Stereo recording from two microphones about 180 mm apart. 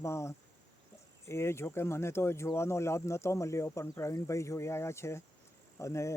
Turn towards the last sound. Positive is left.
turn(degrees=15)  # may be behind; listen again after turning